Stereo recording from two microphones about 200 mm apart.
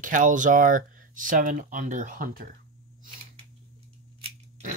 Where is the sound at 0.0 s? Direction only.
40° right (ahead or behind).